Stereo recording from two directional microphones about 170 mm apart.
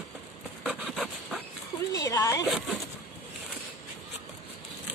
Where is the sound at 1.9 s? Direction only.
20° left (ahead or behind).